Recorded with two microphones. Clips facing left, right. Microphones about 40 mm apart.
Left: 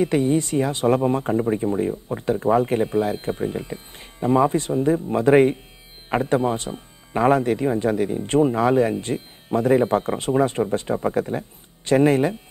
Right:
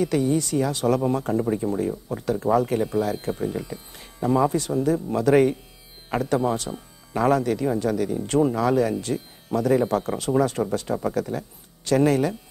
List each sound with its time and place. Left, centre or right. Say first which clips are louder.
0.0 s speech: left 2 dB; left